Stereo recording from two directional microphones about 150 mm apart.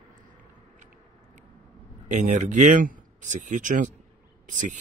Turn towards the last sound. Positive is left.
turn(degrees=-55)  # may be behind; listen again after turning